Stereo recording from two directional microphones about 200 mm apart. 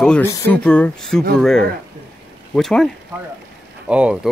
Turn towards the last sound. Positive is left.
turn(degrees=-5)  # may be behind; listen again after turning